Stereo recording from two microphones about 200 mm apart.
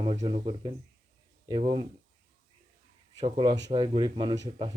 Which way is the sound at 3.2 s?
25° right (ahead or behind).